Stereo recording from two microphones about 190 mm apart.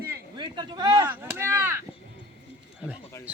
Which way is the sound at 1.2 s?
10° right (ahead or behind).